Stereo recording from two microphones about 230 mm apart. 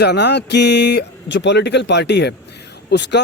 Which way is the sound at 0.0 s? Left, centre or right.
Left.